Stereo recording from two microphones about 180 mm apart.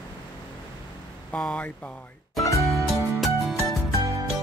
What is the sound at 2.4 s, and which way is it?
Music, 15° left (ahead or behind).